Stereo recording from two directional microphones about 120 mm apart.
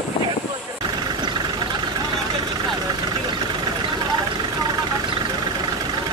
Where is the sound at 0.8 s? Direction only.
35° right (ahead or behind).